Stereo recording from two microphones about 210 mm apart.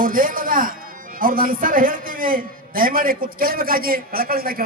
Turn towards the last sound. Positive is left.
turn(degrees=-45)  # may be behind; listen again after turning